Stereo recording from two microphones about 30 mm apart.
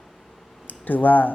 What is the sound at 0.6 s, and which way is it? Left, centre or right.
Speech, left.